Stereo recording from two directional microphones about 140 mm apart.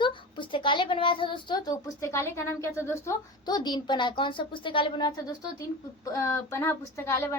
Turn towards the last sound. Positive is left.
turn(degrees=20)  # may be behind; listen again after turning